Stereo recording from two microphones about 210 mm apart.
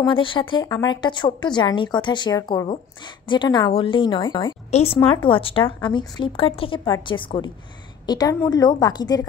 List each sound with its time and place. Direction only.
0.1 s a woman's voice: 25° left (ahead or behind)